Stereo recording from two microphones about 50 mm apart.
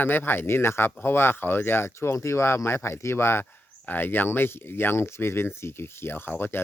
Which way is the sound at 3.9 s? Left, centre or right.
Left.